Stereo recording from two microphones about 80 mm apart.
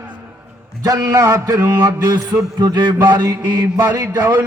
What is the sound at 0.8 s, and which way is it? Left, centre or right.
Mantra, right.